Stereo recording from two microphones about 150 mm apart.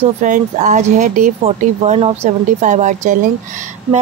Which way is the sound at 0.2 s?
55° right (ahead or behind).